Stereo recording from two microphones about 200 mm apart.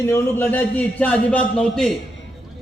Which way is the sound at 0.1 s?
10° left (ahead or behind).